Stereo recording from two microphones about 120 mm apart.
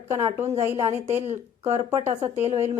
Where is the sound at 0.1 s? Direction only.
25° right (ahead or behind).